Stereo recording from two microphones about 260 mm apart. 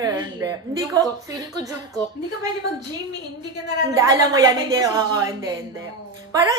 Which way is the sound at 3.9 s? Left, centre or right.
Centre.